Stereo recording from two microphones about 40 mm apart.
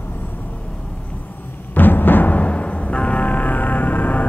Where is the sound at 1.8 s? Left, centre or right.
Left.